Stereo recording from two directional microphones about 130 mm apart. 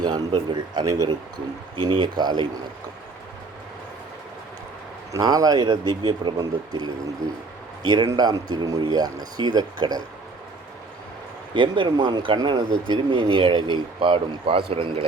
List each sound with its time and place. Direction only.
0.0 s speech: 35° right (ahead or behind)
5.1 s speech: 30° right (ahead or behind)
11.5 s speech: 40° right (ahead or behind)